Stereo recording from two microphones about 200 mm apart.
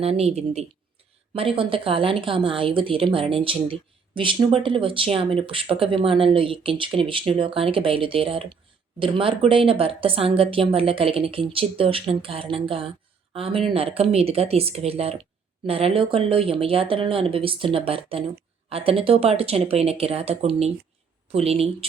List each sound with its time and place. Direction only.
0.0 s a woman's voice: 30° right (ahead or behind)